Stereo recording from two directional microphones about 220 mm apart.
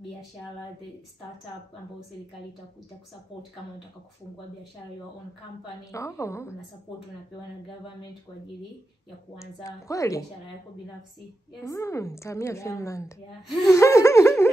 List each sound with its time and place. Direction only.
5.9 s a woman's voice: 15° left (ahead or behind)
9.4 s a woman's voice: 15° left (ahead or behind)
11.6 s a woman's voice: 15° left (ahead or behind)